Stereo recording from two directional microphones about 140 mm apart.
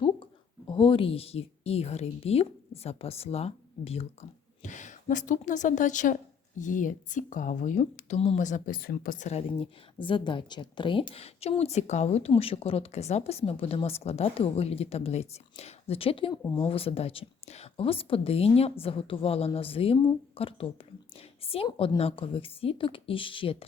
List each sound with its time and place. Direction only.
0.7 s a woman's voice: 40° left (ahead or behind); by 9.4 s 60° left (ahead or behind)
9.6 s a woman's voice: 35° left (ahead or behind)